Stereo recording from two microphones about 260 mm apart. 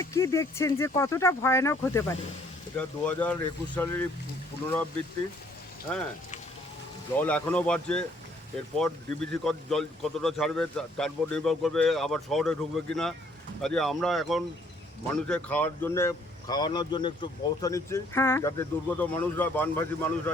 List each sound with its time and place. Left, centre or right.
0.0 s speech: centre
7.2 s speech: centre